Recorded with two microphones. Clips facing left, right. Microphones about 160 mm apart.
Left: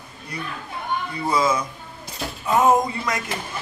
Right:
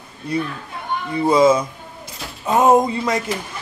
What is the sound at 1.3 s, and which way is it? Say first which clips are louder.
A man's voice: right 8 dB; 25° right (ahead or behind).